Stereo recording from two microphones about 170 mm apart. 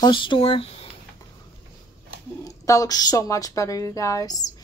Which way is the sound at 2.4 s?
20° left (ahead or behind).